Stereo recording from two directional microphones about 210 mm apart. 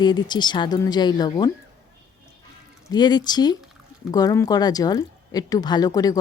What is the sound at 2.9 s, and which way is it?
Speech, 20° left (ahead or behind).